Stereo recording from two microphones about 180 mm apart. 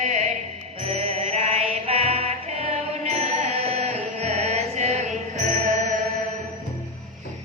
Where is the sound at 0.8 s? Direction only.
35° right (ahead or behind).